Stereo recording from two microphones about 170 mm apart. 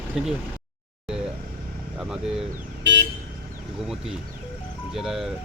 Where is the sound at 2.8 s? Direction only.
90° right.